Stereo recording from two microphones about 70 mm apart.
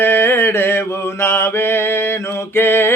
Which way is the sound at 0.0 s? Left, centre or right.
Left.